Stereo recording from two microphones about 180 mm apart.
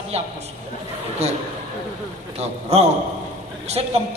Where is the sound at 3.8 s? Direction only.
30° right (ahead or behind).